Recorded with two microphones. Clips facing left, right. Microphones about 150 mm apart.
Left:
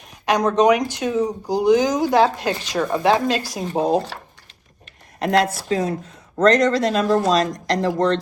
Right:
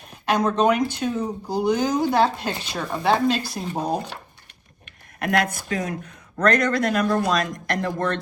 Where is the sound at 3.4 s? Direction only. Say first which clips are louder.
Left 3 dB; 10° left (ahead or behind).